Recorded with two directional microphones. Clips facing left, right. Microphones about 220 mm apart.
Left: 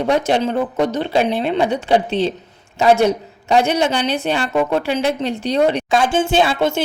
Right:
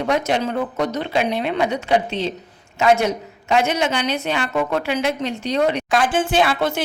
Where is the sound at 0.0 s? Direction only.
30° left (ahead or behind).